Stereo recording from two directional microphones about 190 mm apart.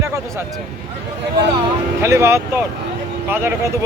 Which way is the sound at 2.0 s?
15° right (ahead or behind).